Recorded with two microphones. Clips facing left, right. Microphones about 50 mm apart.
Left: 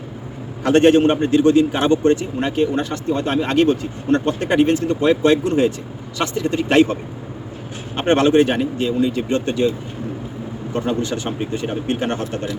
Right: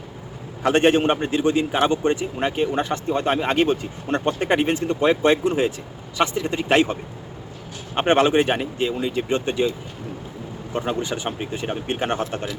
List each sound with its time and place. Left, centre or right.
0.6 s a man's voice: centre
10.8 s a man's voice: centre